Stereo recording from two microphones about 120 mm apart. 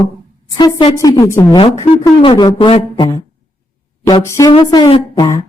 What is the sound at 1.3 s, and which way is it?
Speech, 25° left (ahead or behind).